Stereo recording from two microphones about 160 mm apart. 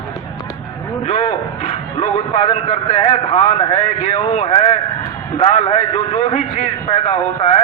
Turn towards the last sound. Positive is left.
turn(degrees=40)  # may be behind; listen again after turning